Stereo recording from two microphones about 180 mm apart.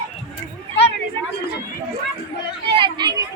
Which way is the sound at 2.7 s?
25° right (ahead or behind).